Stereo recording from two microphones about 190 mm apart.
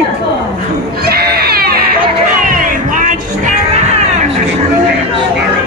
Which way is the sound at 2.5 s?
45° right (ahead or behind).